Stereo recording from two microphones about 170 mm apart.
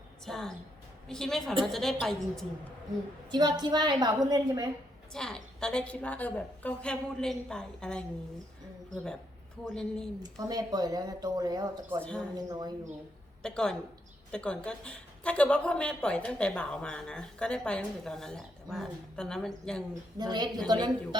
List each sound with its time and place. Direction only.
0.3 s speech: 5° left (ahead or behind)
3.3 s speech: 25° right (ahead or behind)
5.1 s speech: 5° left (ahead or behind)
9.6 s speech: 5° left (ahead or behind)
10.2 s speech: 20° right (ahead or behind)
13.4 s speech: 5° left (ahead or behind)
19.9 s speech: 25° right (ahead or behind)